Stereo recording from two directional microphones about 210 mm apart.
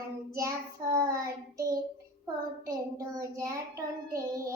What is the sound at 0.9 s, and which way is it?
Child singing, 15° right (ahead or behind).